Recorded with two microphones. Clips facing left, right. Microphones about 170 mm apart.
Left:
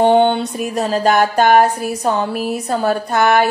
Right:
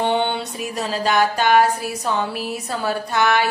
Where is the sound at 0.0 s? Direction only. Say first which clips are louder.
Left 8 dB; 45° left (ahead or behind).